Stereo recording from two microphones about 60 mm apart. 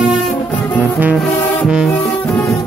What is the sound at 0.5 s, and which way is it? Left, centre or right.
Music, left.